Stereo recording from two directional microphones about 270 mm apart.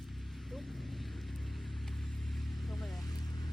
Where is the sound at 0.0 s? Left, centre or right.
Centre.